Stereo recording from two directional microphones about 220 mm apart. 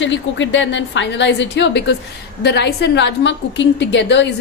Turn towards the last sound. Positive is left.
turn(degrees=55)  # may be behind; listen again after turning